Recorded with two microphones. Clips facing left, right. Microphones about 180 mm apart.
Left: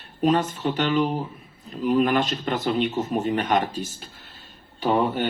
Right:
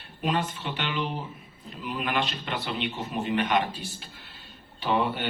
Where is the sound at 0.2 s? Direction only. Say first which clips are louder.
Left 7 dB; 45° left (ahead or behind).